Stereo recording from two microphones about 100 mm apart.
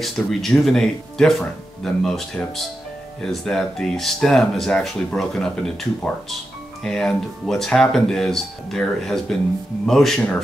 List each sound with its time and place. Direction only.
0.0 s speech: centre (ahead or behind)